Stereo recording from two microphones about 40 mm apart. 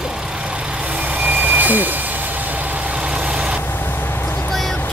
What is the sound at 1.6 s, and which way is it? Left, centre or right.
Vehicle, right.